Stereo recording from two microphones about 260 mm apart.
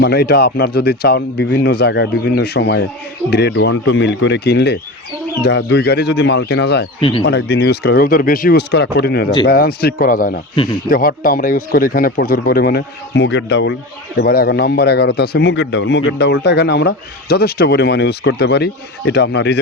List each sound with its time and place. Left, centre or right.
0.0 s a man's voice: left
10.5 s speech: centre
10.8 s a man's voice: left